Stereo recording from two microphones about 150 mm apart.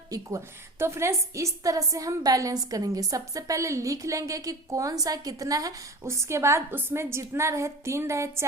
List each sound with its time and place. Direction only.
0.1 s a woman's voice: 20° right (ahead or behind)